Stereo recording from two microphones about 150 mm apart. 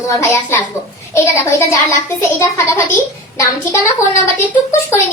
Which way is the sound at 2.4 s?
20° left (ahead or behind).